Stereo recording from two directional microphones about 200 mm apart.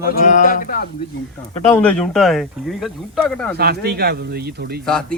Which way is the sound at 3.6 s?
50° right (ahead or behind).